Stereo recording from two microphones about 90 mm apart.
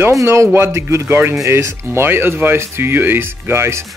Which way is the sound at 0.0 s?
30° right (ahead or behind).